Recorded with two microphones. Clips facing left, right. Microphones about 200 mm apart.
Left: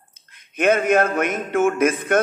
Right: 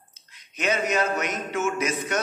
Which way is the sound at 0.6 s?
55° left (ahead or behind).